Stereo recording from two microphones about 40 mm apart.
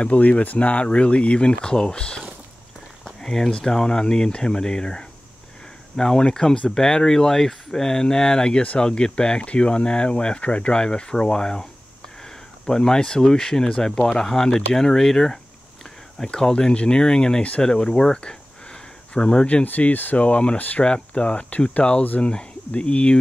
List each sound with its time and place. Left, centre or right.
0.0 s speech: left; by 11.6 s centre
12.6 s speech: centre
16.2 s speech: centre
16.5 s speech: left
19.6 s speech: left
20.2 s speech: left